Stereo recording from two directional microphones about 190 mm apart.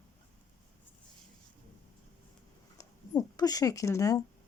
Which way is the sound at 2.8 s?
20° left (ahead or behind).